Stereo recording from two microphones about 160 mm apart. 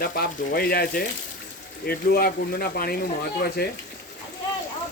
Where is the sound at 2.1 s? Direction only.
70° left (ahead or behind).